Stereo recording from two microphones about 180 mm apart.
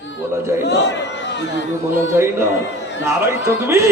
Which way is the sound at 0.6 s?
75° left (ahead or behind).